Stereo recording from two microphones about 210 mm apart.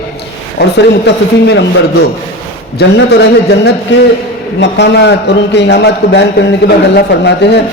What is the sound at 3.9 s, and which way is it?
A man's voice, 60° left (ahead or behind).